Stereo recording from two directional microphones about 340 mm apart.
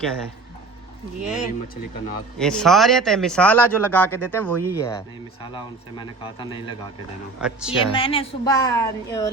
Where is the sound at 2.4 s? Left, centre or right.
Centre.